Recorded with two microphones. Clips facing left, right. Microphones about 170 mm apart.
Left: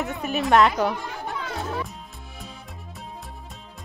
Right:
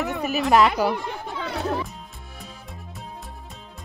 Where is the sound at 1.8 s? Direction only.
Centre (ahead or behind).